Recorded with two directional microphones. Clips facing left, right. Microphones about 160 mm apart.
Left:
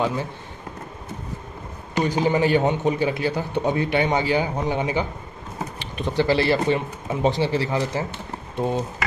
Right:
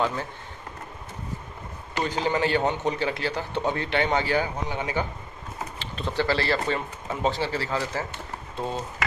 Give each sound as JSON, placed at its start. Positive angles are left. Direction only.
{"t": 0.0, "sound": "a man's voice", "side_deg": 15}
{"t": 2.0, "sound": "a man's voice", "side_deg": 15}